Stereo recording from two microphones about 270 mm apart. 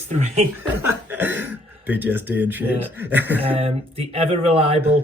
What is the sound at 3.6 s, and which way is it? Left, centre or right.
Speech, right.